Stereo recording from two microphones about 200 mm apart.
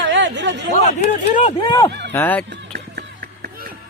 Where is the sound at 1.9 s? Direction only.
60° right (ahead or behind).